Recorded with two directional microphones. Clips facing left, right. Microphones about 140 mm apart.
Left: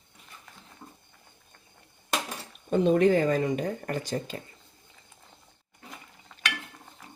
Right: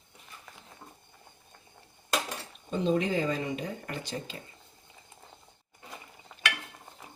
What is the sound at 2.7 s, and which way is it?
Speech, 60° left (ahead or behind).